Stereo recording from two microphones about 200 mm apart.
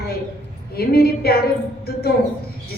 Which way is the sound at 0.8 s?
50° left (ahead or behind).